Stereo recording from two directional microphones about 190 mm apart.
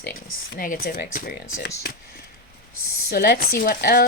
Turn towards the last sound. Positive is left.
turn(degrees=55)  # may be behind; listen again after turning